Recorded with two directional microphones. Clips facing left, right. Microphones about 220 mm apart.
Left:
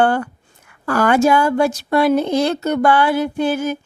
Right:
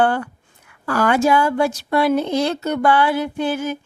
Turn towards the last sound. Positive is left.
turn(degrees=45)  # may be behind; listen again after turning